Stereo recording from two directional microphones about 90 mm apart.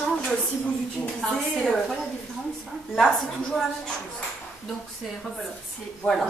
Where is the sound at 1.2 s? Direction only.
5° left (ahead or behind).